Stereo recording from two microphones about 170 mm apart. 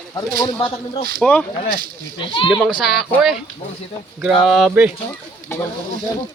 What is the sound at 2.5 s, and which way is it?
Speech, centre (ahead or behind).